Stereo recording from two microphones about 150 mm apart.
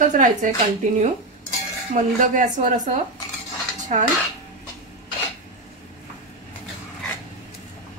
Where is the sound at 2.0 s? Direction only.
60° right (ahead or behind).